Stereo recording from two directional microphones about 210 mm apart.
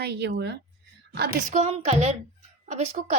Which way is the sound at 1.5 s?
30° right (ahead or behind).